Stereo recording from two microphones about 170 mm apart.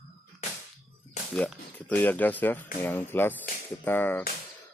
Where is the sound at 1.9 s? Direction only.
10° left (ahead or behind).